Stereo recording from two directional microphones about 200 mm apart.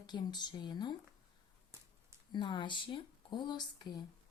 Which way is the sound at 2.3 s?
25° left (ahead or behind).